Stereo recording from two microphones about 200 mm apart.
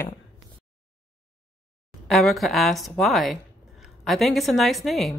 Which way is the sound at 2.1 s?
Centre (ahead or behind).